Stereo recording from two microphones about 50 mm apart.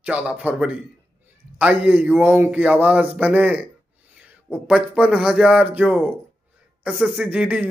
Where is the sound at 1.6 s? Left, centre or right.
Right.